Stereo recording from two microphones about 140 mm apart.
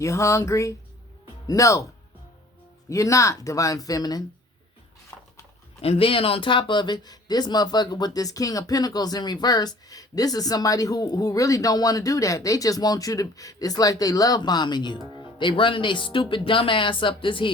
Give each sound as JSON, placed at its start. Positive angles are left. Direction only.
{"t": 0.0, "sound": "speech", "side_deg": 20}
{"t": 2.9, "sound": "speech", "side_deg": 20}
{"t": 5.1, "sound": "horse", "side_deg": 20}
{"t": 5.8, "sound": "speech", "side_deg": 45}